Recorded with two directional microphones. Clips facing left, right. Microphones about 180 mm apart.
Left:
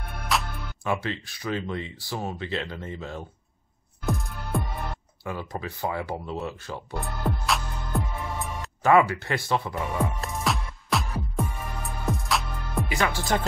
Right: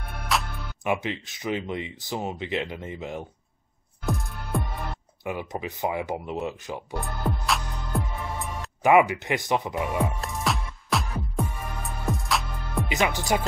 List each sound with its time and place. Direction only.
0.3 s music: centre (ahead or behind)
0.8 s speech: 15° right (ahead or behind)
4.0 s music: centre (ahead or behind)
5.2 s speech: 15° right (ahead or behind)
7.0 s music: centre (ahead or behind)
8.8 s speech: 15° right (ahead or behind)
10.0 s music: centre (ahead or behind)
12.8 s speech: 20° right (ahead or behind)